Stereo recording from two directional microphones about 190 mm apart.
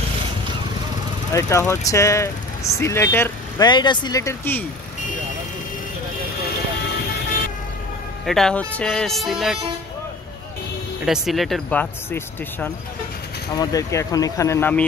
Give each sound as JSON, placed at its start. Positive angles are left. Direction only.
{"t": 1.3, "sound": "speech", "side_deg": 15}
{"t": 8.3, "sound": "speech", "side_deg": 5}
{"t": 11.1, "sound": "speech", "side_deg": 0}
{"t": 13.6, "sound": "speech", "side_deg": 20}